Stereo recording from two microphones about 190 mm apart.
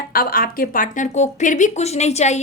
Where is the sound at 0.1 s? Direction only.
50° left (ahead or behind).